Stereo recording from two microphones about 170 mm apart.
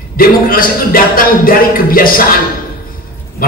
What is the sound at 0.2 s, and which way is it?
A man's voice, 55° left (ahead or behind).